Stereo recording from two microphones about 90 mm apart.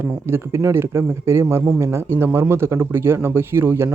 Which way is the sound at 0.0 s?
25° right (ahead or behind).